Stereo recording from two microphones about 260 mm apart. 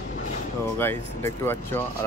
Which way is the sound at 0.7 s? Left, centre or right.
Centre.